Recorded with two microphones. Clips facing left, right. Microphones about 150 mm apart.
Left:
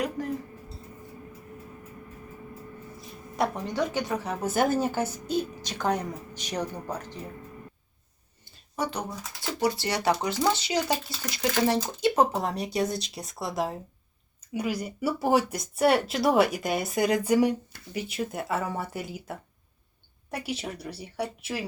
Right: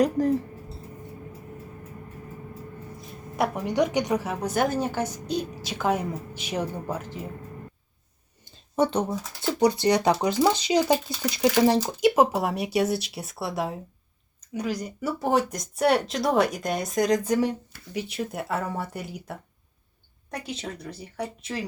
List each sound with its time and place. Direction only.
0.2 s speech: 35° right (ahead or behind)
3.3 s speech: 5° right (ahead or behind)
4.3 s speech: 5° left (ahead or behind)
8.7 s speech: 25° right (ahead or behind); by 13.7 s 5° right (ahead or behind)
14.4 s speech: 5° left (ahead or behind)